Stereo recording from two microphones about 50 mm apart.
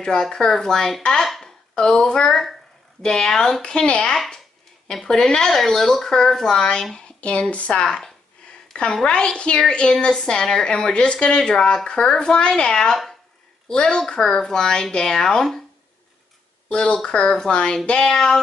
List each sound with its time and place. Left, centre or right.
0.0 s a woman's voice: centre
1.4 s a sound: centre
3.0 s a woman's voice: centre
3.6 s a woman's voice: left
7.2 s a woman's voice: left
16.6 s a woman's voice: centre